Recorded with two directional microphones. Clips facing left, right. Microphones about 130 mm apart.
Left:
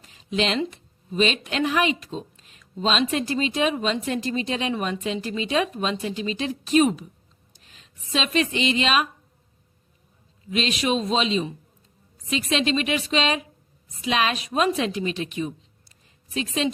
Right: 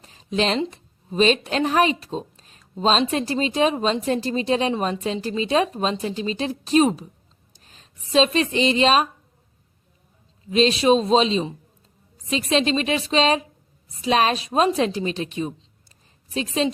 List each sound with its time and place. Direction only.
0.0 s a sound: 35° right (ahead or behind)
0.6 s a woman's voice: 35° right (ahead or behind)
10.5 s a woman's voice: 35° right (ahead or behind)